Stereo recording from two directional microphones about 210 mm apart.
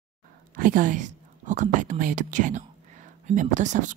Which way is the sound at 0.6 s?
40° right (ahead or behind).